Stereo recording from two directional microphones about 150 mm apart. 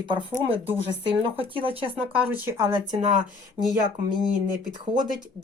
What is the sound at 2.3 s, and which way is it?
Speech, 15° right (ahead or behind).